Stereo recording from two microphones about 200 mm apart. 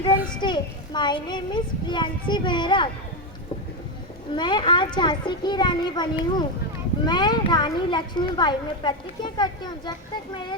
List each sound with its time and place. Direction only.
0.4 s speech: 20° left (ahead or behind)
4.4 s speech: 20° left (ahead or behind)